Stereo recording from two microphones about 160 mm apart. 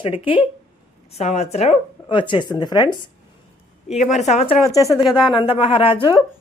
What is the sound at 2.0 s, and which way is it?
Speech, 30° left (ahead or behind).